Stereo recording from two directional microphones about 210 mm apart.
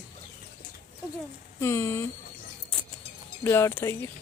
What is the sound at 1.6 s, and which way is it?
Speech, 15° left (ahead or behind).